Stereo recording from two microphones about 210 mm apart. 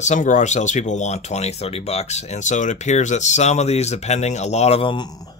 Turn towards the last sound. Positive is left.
turn(degrees=20)  # may be behind; listen again after turning